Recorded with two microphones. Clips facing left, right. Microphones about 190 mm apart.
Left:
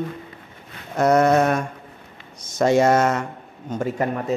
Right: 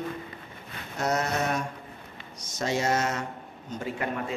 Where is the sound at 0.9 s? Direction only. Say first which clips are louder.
Left 12 dB; 55° left (ahead or behind).